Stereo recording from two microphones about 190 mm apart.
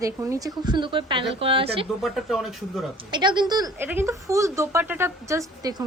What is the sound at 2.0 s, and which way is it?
Speech, centre (ahead or behind).